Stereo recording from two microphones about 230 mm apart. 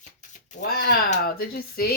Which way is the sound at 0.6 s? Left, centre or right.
Left.